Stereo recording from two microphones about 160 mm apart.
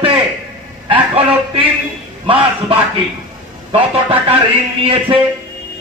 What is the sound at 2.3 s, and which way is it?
A man's voice, 35° right (ahead or behind).